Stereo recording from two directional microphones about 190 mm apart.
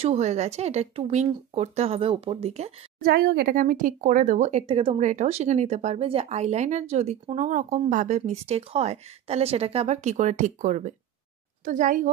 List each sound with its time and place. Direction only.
0.0 s speech: 35° right (ahead or behind)
3.0 s a woman's voice: 55° right (ahead or behind)